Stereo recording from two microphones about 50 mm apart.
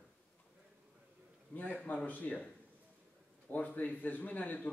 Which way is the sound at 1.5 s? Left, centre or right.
Left.